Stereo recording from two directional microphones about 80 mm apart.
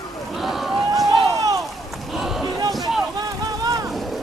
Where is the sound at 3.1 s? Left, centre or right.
Right.